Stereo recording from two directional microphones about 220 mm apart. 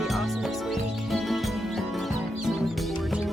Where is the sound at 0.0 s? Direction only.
Centre (ahead or behind).